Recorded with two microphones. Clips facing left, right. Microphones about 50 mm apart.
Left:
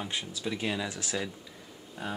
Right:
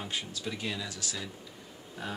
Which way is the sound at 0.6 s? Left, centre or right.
Left.